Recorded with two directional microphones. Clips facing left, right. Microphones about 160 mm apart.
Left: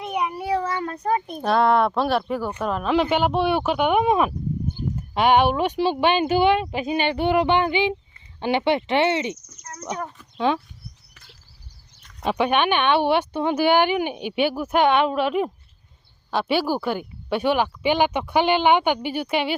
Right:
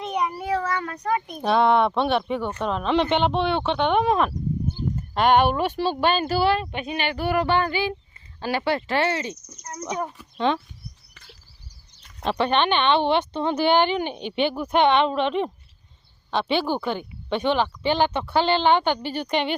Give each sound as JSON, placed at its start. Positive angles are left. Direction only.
{"t": 0.0, "sound": "meow", "side_deg": 10}
{"t": 1.4, "sound": "speech", "side_deg": 0}
{"t": 9.9, "sound": "speech", "side_deg": -10}
{"t": 10.3, "sound": "speech", "side_deg": 5}
{"t": 12.2, "sound": "speech", "side_deg": 10}